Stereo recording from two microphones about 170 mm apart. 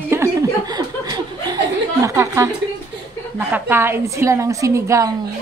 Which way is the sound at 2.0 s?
20° right (ahead or behind).